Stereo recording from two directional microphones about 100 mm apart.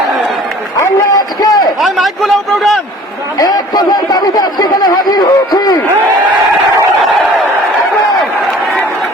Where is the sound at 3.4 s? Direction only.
40° left (ahead or behind).